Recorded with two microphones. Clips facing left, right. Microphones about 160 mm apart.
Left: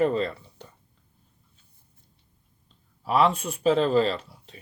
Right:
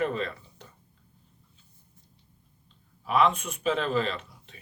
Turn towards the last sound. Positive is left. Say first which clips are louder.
# left 5 dB
turn(degrees=35)  # may be behind; listen again after turning